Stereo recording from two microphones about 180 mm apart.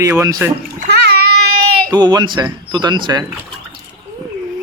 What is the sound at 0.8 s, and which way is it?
Bathtub, 65° right (ahead or behind).